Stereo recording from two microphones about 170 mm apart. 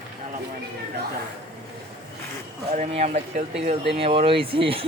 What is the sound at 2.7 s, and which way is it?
Speech, 40° right (ahead or behind).